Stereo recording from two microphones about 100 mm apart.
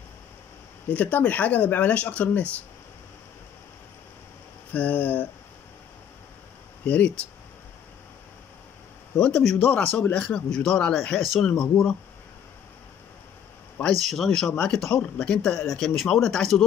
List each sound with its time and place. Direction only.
0.8 s speech: 15° left (ahead or behind)
4.7 s speech: 15° left (ahead or behind)
6.8 s speech: 15° left (ahead or behind)
9.2 s speech: 5° left (ahead or behind)
13.9 s speech: centre (ahead or behind)